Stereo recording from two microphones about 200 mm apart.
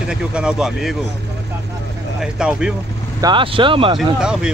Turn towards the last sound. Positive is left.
turn(degrees=-5)  # may be behind; listen again after turning